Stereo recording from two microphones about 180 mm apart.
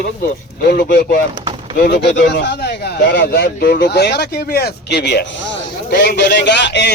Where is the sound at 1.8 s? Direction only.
70° left (ahead or behind).